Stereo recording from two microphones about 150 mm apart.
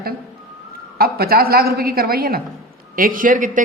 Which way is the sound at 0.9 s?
90° right.